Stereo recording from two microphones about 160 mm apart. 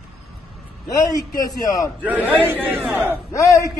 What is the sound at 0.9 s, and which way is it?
Speech, 20° left (ahead or behind).